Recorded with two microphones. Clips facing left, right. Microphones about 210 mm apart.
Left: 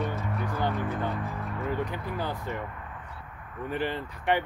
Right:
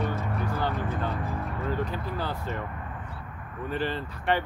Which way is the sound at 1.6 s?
15° left (ahead or behind).